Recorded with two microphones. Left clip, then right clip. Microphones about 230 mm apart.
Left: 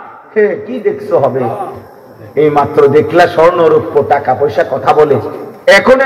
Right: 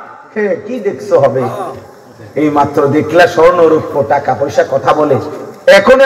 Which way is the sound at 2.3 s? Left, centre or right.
Left.